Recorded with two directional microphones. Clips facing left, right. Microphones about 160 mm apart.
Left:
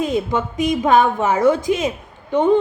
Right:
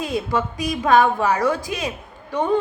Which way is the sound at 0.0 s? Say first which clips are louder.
Left 3 dB; 20° left (ahead or behind).